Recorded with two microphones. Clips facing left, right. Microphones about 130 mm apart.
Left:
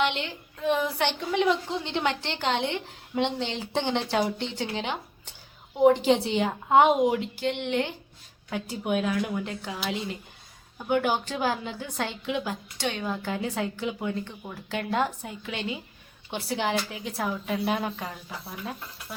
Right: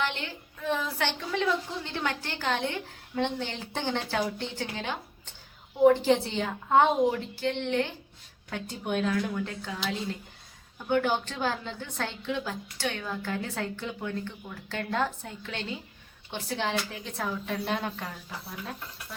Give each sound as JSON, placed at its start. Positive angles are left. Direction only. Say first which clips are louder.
{"t": 0.6, "sound": "a woman's voice", "louder": "left 4 dB", "side_deg": 15}